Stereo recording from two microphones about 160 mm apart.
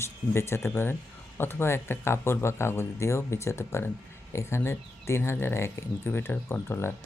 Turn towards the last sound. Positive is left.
turn(degrees=15)  # may be behind; listen again after turning